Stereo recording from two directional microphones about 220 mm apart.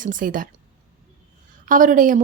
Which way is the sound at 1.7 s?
35° right (ahead or behind).